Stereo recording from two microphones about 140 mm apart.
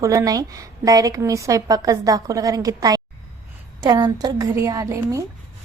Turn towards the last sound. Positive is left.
turn(degrees=-25)  # may be behind; listen again after turning